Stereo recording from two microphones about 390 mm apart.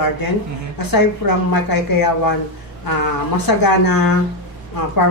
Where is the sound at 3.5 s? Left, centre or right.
Left.